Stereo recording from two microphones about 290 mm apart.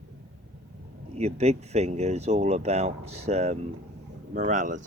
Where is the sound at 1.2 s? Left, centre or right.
Right.